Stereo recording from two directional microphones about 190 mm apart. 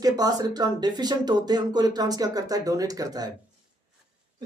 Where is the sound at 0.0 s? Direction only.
20° right (ahead or behind).